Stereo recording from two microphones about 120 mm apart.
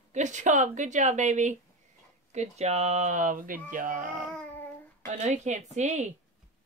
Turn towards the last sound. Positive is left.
turn(degrees=-75)  # may be behind; listen again after turning